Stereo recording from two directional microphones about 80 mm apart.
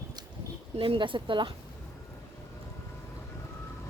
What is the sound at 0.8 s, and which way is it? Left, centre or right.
Speech, right.